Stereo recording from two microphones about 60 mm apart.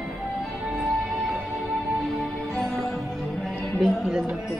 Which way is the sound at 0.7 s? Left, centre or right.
Centre.